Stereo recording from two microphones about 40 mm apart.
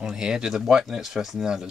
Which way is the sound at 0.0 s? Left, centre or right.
Centre.